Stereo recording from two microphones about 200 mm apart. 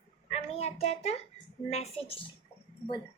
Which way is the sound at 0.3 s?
30° left (ahead or behind).